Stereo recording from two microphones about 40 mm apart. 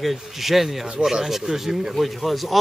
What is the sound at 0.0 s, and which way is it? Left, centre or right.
Speech, centre.